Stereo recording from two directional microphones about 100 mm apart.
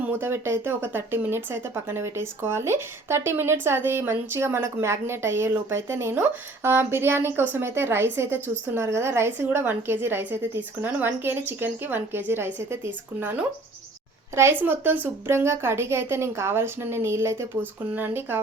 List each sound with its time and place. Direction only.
0.2 s speech: 25° right (ahead or behind)